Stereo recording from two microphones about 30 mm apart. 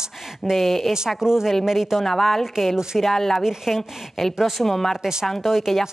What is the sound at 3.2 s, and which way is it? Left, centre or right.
Speech, centre.